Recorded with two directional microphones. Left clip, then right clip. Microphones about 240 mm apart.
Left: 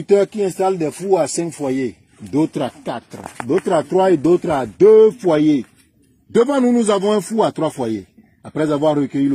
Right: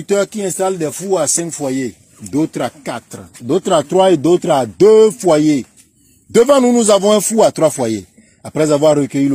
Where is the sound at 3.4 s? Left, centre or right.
Right.